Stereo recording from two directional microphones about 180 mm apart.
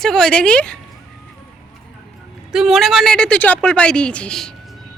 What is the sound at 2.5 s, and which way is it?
Speech, centre (ahead or behind).